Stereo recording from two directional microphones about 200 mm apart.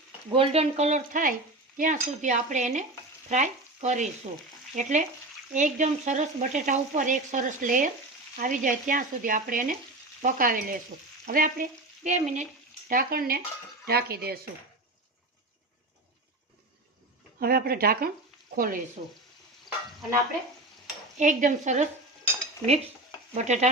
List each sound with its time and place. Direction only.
0.3 s stir: 25° right (ahead or behind)
3.2 s frying: 35° right (ahead or behind)
4.7 s stir: 40° right (ahead or behind)
8.4 s frying: 40° right (ahead or behind)
12.0 s stir: 35° right (ahead or behind)
12.9 s frying: 45° right (ahead or behind)
17.4 s frying: 50° right (ahead or behind)
19.0 s stir: 40° right (ahead or behind)
21.2 s stir: 40° right (ahead or behind)
23.3 s stir: 35° right (ahead or behind)